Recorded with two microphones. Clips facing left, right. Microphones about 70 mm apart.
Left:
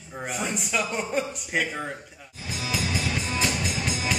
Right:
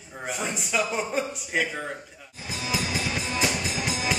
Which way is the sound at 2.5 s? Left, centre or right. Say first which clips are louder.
Right 1 dB; centre.